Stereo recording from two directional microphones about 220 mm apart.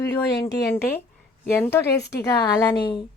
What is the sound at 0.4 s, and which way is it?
A woman's voice, 10° left (ahead or behind).